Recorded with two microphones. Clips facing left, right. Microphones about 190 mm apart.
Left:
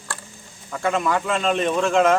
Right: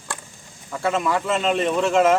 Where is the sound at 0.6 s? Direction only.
5° right (ahead or behind).